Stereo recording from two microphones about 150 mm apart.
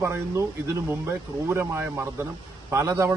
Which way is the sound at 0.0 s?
20° right (ahead or behind).